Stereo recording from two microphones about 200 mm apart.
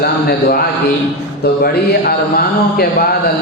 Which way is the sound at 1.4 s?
50° left (ahead or behind).